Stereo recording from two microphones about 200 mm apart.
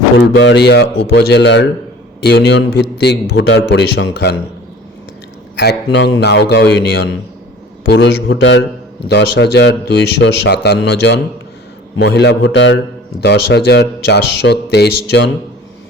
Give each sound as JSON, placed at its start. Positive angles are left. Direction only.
{"t": 0.2, "sound": "a man's voice", "side_deg": 55}
{"t": 5.5, "sound": "a man's voice", "side_deg": 60}